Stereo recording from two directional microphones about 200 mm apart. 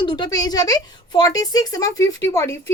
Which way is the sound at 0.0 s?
20° left (ahead or behind).